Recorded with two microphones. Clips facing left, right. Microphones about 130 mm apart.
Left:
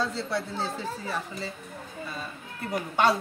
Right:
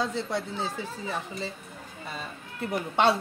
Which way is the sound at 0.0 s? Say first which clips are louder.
Even; 20° right (ahead or behind).